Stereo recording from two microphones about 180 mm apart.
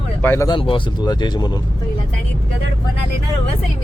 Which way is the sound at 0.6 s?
30° left (ahead or behind).